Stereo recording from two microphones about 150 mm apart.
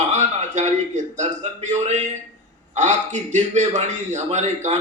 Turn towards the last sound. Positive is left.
turn(degrees=-50)  # may be behind; listen again after turning